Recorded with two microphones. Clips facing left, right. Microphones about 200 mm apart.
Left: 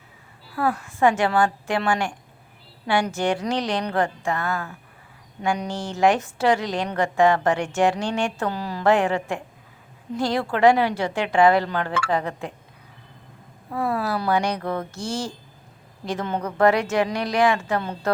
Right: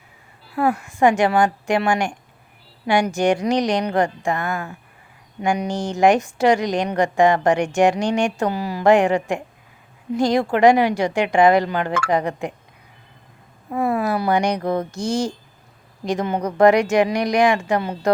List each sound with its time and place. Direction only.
0.5 s a woman's voice: 15° right (ahead or behind)
13.7 s a woman's voice: 20° right (ahead or behind)